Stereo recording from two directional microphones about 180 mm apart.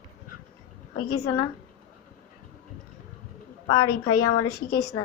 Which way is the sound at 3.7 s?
20° left (ahead or behind).